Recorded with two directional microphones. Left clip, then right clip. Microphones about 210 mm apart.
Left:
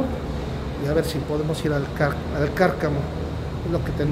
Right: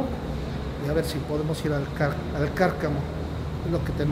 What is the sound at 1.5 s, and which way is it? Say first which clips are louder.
Speech: left 3 dB; 10° left (ahead or behind).